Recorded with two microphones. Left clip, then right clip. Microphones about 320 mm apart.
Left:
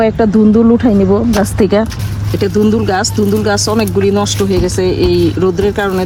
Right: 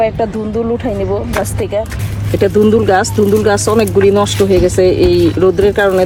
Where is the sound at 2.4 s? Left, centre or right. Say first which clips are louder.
Right 3 dB; centre.